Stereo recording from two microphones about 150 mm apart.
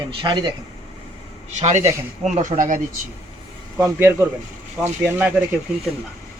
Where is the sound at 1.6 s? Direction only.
50° right (ahead or behind).